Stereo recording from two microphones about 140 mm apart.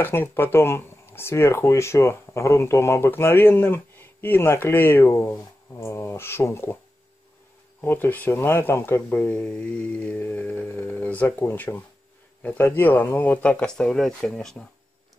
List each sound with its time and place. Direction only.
0.0 s speech: 15° left (ahead or behind)
7.8 s speech: 15° left (ahead or behind)